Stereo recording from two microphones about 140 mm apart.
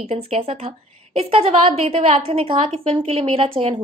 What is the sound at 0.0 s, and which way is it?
A woman's voice, 45° right (ahead or behind).